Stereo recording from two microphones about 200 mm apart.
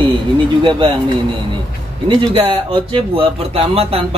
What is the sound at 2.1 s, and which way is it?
Speech, 25° right (ahead or behind).